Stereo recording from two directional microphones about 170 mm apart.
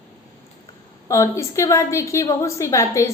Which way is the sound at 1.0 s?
20° left (ahead or behind).